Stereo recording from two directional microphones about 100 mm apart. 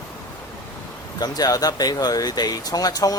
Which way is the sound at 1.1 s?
40° left (ahead or behind).